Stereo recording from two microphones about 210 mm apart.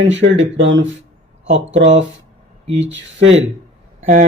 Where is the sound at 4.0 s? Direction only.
35° right (ahead or behind).